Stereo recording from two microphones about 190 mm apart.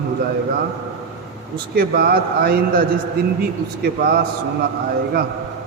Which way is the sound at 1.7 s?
50° right (ahead or behind).